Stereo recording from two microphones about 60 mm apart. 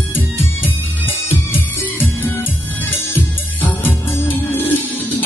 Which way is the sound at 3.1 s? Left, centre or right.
Left.